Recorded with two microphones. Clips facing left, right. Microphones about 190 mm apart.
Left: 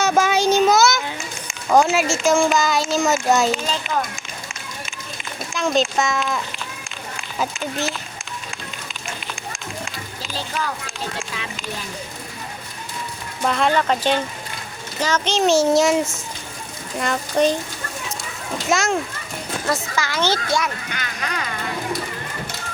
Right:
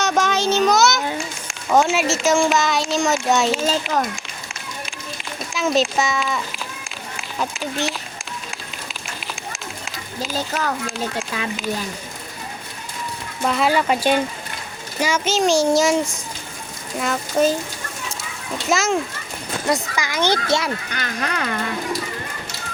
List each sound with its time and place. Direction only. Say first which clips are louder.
0.0 s a sound: left 2 dB; 5° left (ahead or behind)
1.5 s speech: left 1 dB; centre (ahead or behind)
5.5 s speech: even; centre (ahead or behind)
8.4 s run: even; centre (ahead or behind)
10.3 s speech: right 2 dB; 45° right (ahead or behind)
13.4 s speech: even; 5° right (ahead or behind)
18.7 s speech: right 1 dB; centre (ahead or behind)
19.6 s speech: right 2 dB; 15° right (ahead or behind)
20.6 s speech: even; 35° right (ahead or behind)